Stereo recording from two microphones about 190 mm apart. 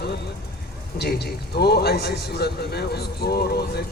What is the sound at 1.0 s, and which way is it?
A man's voice, 60° left (ahead or behind).